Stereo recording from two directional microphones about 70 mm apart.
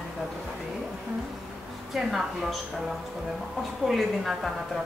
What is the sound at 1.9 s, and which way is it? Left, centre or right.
Speech, centre.